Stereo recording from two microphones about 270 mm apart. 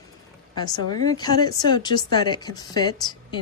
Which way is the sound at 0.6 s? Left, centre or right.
Centre.